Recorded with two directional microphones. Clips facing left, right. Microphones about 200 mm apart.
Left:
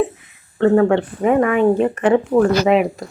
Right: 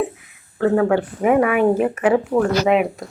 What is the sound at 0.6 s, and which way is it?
Speech, 5° right (ahead or behind).